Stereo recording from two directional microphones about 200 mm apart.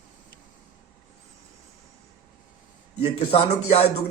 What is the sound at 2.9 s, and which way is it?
Speech, 30° left (ahead or behind).